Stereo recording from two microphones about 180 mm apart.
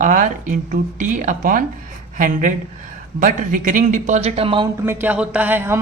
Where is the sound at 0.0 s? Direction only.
45° right (ahead or behind); by 4.7 s 30° right (ahead or behind).